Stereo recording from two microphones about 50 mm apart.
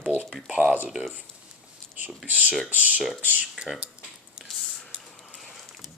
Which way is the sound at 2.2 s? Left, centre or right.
Right.